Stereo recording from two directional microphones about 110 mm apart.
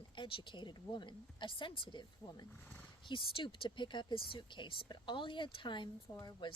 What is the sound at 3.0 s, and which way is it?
A woman's voice, 50° left (ahead or behind).